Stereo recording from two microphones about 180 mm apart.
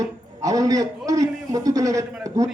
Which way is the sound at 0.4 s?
20° right (ahead or behind).